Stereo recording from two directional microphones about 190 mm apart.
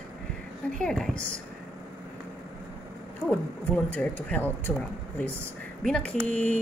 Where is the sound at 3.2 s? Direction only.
10° left (ahead or behind).